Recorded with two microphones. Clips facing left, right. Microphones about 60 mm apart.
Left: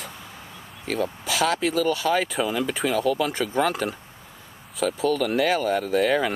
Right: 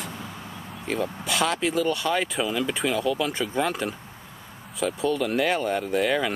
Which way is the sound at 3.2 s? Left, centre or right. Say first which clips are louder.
Left 2 dB; centre.